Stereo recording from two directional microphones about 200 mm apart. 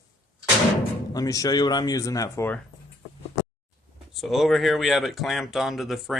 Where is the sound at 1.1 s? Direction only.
15° left (ahead or behind).